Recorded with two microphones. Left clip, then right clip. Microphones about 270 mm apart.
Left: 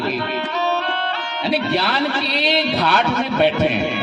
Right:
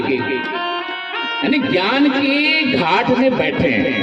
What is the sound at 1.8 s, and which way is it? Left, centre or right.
A man's voice, left.